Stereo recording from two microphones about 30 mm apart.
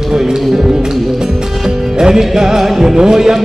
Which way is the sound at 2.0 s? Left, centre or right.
Right.